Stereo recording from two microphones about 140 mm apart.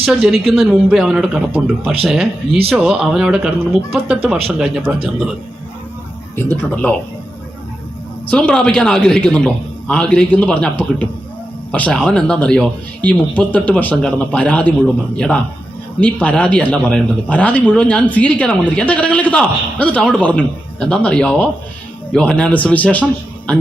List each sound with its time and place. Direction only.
0.0 s speech: centre (ahead or behind)
6.3 s speech: 15° left (ahead or behind)
8.3 s speech: 5° left (ahead or behind)